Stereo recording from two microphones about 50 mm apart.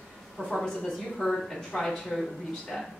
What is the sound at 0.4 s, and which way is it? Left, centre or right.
A woman's voice, centre.